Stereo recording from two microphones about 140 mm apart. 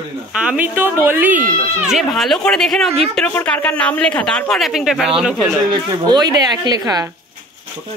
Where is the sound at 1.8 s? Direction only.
Centre (ahead or behind).